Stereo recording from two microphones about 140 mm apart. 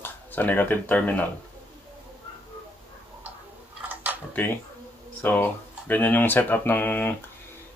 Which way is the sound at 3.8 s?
10° right (ahead or behind).